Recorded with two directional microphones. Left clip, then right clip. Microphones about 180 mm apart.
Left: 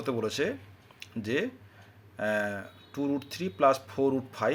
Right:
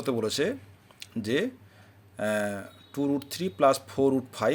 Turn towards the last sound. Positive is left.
turn(degrees=-25)  # may be behind; listen again after turning